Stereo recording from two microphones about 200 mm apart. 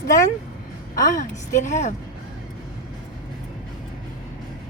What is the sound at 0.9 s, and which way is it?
Speech, 40° left (ahead or behind).